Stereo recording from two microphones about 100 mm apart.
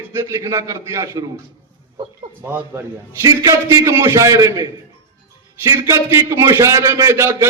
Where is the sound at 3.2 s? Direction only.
35° right (ahead or behind).